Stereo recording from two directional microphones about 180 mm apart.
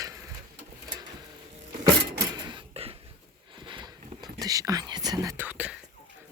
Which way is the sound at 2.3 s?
25° right (ahead or behind).